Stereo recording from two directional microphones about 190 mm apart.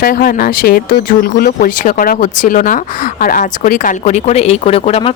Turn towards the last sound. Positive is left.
turn(degrees=30)  # may be behind; listen again after turning